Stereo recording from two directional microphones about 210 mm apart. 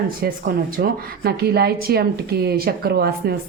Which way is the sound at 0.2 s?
45° right (ahead or behind).